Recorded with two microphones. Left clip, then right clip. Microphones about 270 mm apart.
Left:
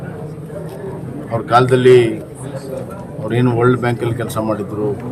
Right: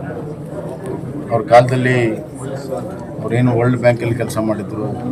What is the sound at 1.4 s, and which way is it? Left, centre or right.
Speech, centre.